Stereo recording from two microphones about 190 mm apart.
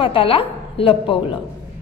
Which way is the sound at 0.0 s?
30° left (ahead or behind).